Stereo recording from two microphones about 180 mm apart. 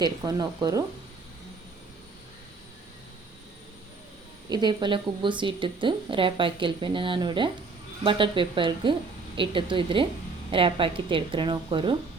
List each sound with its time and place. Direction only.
0.0 s a woman's voice: 20° right (ahead or behind)
4.4 s a woman's voice: 25° right (ahead or behind)